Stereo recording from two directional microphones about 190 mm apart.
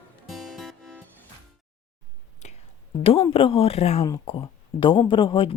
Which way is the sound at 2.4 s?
35° left (ahead or behind).